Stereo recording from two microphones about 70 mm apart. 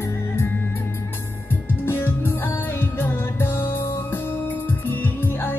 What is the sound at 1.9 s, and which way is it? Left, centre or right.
Music, left.